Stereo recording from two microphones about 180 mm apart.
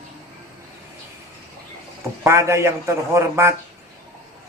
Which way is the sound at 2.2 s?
15° right (ahead or behind).